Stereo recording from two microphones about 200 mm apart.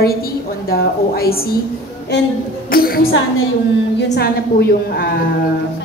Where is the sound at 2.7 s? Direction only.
50° left (ahead or behind).